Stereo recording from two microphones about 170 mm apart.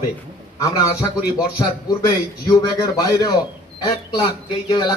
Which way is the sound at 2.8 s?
20° left (ahead or behind).